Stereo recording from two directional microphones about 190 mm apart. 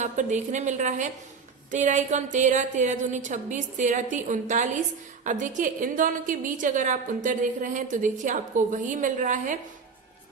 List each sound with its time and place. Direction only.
0.0 s a woman's voice: 40° right (ahead or behind)